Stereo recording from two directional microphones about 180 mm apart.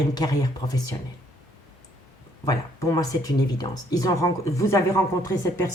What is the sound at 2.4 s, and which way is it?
Speech, 20° left (ahead or behind).